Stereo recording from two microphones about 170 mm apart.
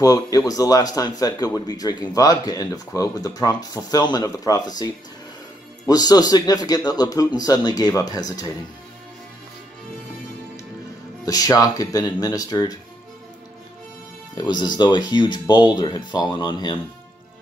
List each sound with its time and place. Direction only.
0.0 s speech: 20° left (ahead or behind)
11.2 s speech: 20° left (ahead or behind)
14.3 s speech: 25° left (ahead or behind)